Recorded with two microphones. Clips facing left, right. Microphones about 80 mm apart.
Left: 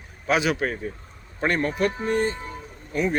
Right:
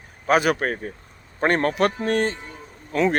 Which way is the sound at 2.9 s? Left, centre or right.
Right.